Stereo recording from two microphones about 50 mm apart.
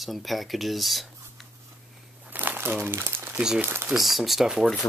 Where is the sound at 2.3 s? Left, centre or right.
Right.